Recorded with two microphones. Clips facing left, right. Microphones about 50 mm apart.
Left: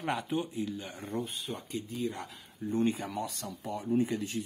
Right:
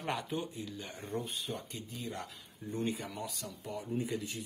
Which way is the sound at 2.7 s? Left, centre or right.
Left.